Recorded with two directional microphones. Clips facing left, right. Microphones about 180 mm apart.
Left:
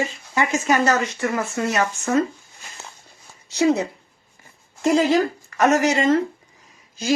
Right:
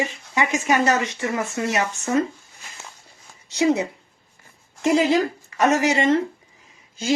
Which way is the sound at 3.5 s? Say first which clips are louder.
Left 1 dB; 20° right (ahead or behind).